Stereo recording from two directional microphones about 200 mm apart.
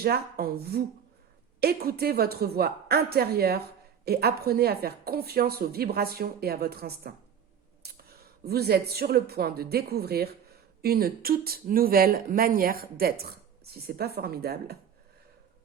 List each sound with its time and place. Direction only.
0.0 s a woman's voice: 50° right (ahead or behind)